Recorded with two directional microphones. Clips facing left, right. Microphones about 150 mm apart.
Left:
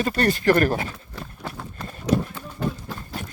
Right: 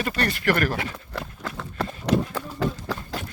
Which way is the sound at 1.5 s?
75° right (ahead or behind).